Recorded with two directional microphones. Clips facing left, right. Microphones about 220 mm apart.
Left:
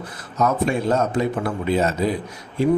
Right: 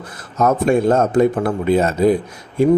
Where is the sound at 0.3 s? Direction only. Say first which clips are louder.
Right 5 dB; 50° right (ahead or behind).